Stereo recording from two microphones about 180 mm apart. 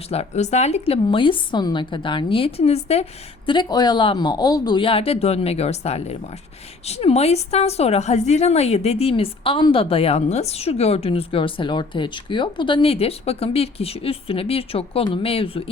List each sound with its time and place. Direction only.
0.1 s a woman's voice: 35° left (ahead or behind)